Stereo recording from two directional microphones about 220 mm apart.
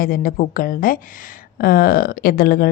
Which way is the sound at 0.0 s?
40° left (ahead or behind).